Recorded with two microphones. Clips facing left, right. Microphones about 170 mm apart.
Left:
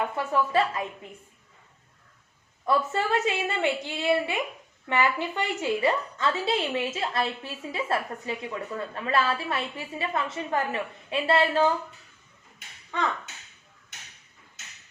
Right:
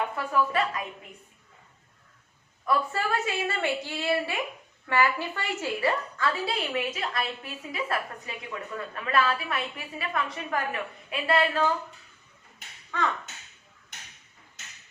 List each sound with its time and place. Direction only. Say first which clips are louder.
0.3 s a woman's voice: left 1 dB; 25° left (ahead or behind)
2.6 s a woman's voice: left 2 dB; 25° left (ahead or behind)